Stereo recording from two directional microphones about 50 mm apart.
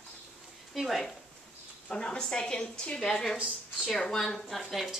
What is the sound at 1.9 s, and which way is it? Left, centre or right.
A woman's voice, centre.